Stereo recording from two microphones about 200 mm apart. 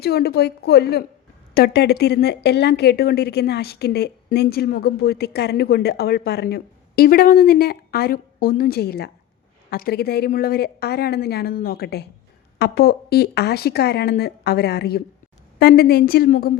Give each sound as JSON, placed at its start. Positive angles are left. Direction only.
{"t": 0.0, "sound": "speech", "side_deg": 55}